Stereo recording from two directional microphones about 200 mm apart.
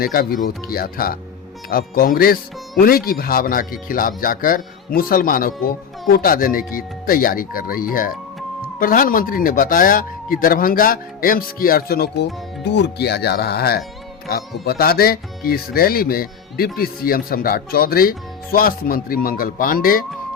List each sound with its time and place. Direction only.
0.0 s speech: 45° left (ahead or behind)